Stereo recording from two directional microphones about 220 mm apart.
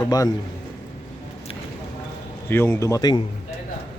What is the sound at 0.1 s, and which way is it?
Speech, 20° left (ahead or behind).